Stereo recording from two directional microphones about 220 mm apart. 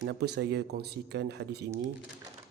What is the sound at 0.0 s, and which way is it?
Speech, 50° right (ahead or behind).